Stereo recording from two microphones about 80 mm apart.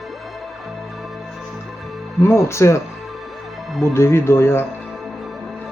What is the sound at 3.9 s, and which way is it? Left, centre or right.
Speech, left.